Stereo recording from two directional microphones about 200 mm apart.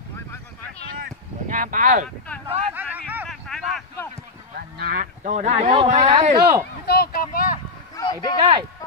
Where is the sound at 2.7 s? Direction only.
10° right (ahead or behind).